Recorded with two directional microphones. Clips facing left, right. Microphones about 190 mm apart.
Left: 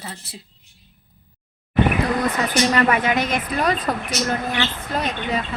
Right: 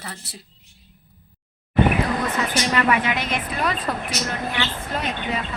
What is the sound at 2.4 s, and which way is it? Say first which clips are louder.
A woman's voice: left 4 dB; 40° left (ahead or behind).